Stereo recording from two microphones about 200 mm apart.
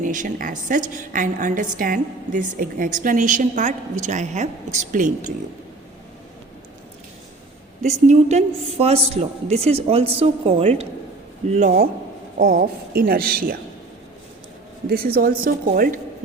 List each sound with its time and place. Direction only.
0.0 s a woman's voice: 40° right (ahead or behind)
8.0 s a woman's voice: 35° right (ahead or behind)
12.4 s a woman's voice: 50° right (ahead or behind)
14.8 s a woman's voice: 45° right (ahead or behind)